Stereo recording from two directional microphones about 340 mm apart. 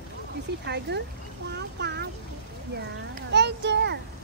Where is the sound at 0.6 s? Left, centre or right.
Right.